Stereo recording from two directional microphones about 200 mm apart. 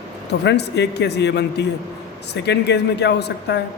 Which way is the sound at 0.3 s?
55° left (ahead or behind).